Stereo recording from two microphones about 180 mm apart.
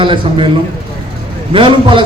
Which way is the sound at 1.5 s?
30° right (ahead or behind).